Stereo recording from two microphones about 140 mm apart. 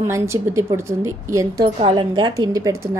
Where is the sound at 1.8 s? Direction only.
40° right (ahead or behind); by 3.0 s 20° right (ahead or behind).